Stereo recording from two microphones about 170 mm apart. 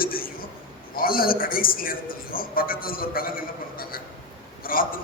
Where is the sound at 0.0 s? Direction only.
60° left (ahead or behind).